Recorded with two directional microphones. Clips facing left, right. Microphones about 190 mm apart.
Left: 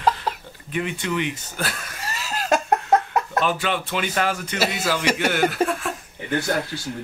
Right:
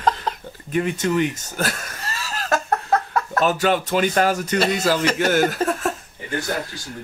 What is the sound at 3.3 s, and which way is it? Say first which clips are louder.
Speech: right 6 dB; 45° right (ahead or behind).